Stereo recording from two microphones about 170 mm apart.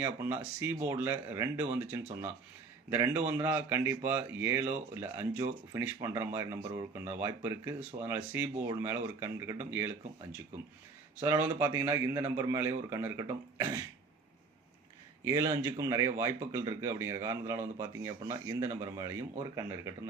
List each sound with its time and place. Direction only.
0.0 s speech: 10° right (ahead or behind)
11.2 s speech: 15° right (ahead or behind)
15.2 s speech: 20° right (ahead or behind)